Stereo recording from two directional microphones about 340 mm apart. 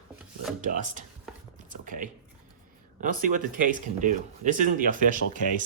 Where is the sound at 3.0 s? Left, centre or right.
Right.